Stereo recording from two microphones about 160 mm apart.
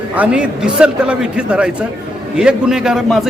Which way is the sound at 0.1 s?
10° right (ahead or behind).